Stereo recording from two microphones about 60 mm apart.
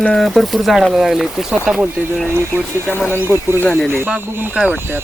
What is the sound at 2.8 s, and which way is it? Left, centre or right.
Speech, left.